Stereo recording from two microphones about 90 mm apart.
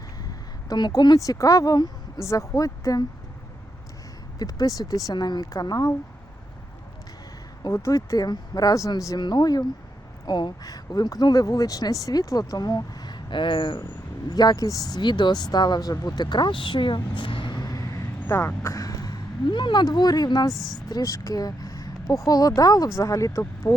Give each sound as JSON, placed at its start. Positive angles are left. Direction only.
{"t": 0.7, "sound": "speech", "side_deg": 50}
{"t": 2.2, "sound": "speech", "side_deg": 35}
{"t": 4.4, "sound": "speech", "side_deg": 45}
{"t": 7.7, "sound": "speech", "side_deg": 35}
{"t": 14.3, "sound": "speech", "side_deg": 50}
{"t": 18.3, "sound": "a sound", "side_deg": 30}
{"t": 19.5, "sound": "speech", "side_deg": 60}
{"t": 20.5, "sound": "speech", "side_deg": 0}
{"t": 20.9, "sound": "speech", "side_deg": 40}